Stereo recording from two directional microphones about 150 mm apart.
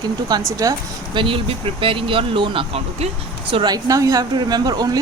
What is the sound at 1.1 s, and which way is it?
Speech, 35° right (ahead or behind).